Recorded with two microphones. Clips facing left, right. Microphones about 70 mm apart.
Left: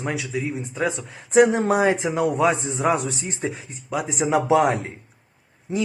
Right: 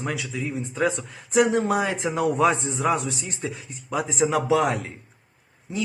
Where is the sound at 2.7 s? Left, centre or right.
Left.